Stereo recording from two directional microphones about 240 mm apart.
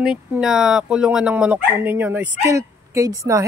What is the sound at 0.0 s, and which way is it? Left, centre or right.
Speech, centre.